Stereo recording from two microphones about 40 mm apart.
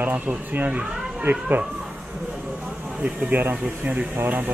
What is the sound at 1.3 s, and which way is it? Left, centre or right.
Speech, right.